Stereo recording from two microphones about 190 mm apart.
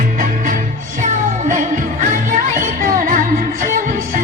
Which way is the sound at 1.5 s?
40° right (ahead or behind).